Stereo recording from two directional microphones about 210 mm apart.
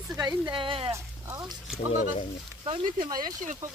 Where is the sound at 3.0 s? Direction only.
20° right (ahead or behind).